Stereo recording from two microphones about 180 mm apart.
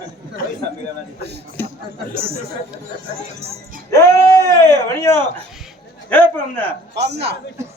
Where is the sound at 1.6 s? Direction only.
15° left (ahead or behind).